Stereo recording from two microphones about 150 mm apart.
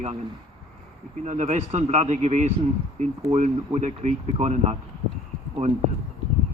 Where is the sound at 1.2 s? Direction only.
55° right (ahead or behind).